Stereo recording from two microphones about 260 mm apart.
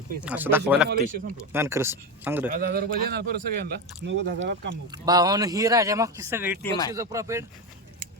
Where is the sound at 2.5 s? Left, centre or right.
Right.